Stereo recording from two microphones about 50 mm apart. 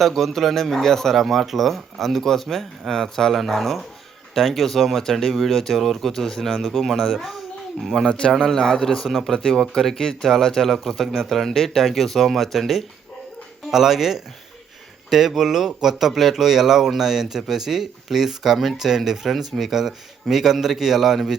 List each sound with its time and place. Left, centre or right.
0.0 s speech: centre
8.0 s a man's voice: centre
9.0 s speech: centre
9.3 s speech: centre